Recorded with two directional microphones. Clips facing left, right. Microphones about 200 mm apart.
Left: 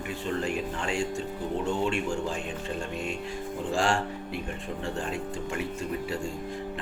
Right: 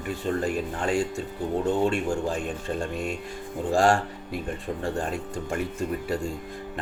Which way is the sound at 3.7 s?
40° right (ahead or behind).